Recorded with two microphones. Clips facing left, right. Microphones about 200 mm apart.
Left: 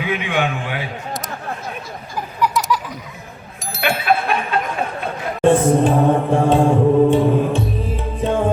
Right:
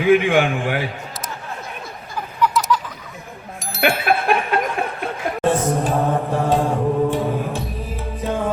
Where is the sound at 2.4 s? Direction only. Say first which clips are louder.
Even; 10° left (ahead or behind).